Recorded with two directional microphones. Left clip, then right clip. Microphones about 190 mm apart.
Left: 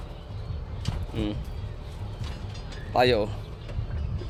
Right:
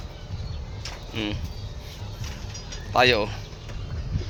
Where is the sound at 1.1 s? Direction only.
10° left (ahead or behind).